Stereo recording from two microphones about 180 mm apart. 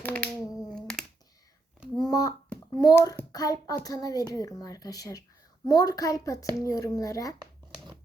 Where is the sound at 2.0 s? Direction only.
20° left (ahead or behind).